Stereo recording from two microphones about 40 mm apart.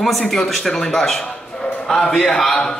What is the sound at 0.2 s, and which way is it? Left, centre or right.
A man's voice, centre.